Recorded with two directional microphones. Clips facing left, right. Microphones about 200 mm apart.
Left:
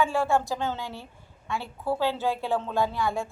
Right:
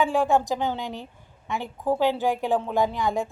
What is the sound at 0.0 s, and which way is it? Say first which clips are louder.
A woman's voice: right 3 dB; 15° right (ahead or behind).